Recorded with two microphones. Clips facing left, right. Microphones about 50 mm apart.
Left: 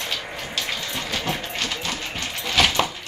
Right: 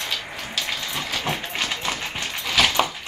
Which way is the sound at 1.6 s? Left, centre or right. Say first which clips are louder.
Right 1 dB; centre.